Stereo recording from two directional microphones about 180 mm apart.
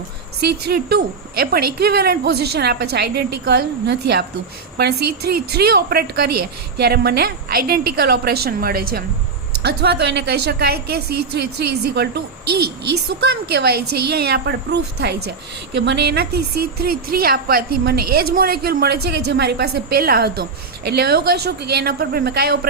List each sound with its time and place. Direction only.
0.3 s a woman's voice: 60° right (ahead or behind)
9.6 s a woman's voice: 65° right (ahead or behind)
15.7 s a woman's voice: 75° right (ahead or behind); by 22.5 s 60° right (ahead or behind)